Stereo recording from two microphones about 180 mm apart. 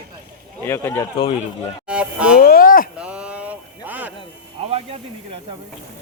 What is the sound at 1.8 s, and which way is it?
Speech, 5° right (ahead or behind).